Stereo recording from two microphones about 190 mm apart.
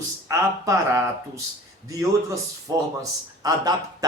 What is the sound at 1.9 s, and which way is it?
Speech, 15° right (ahead or behind).